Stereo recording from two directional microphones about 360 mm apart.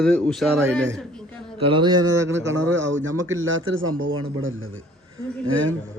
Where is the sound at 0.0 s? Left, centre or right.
Centre.